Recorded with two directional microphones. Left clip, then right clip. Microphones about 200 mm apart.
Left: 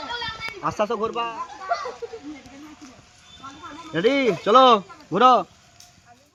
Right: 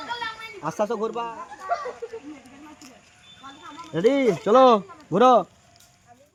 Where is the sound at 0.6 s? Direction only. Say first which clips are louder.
Left 2 dB; 15° right (ahead or behind).